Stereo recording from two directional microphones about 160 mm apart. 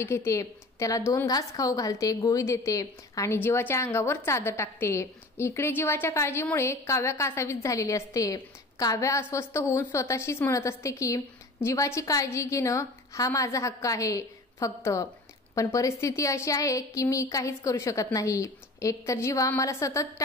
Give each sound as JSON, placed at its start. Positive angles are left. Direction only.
{"t": 0.0, "sound": "a woman's voice", "side_deg": 15}